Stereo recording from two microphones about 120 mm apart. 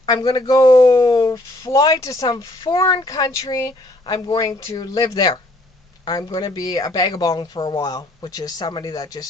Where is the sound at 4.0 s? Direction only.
40° left (ahead or behind).